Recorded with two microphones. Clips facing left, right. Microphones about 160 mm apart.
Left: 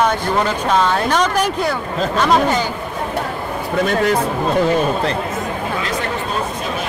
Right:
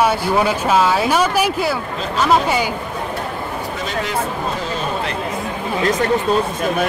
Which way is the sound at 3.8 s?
50° left (ahead or behind).